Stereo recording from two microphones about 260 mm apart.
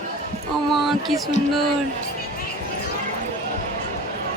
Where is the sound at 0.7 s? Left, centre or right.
Centre.